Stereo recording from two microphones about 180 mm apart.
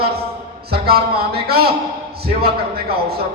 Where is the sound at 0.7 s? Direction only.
60° right (ahead or behind).